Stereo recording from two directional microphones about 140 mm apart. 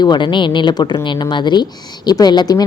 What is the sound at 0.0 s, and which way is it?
A woman's voice, 35° left (ahead or behind).